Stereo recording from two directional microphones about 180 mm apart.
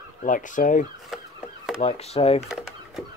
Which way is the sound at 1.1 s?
Centre (ahead or behind).